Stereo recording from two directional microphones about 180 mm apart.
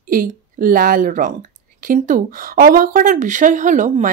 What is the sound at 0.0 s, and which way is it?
A woman's voice, 50° right (ahead or behind).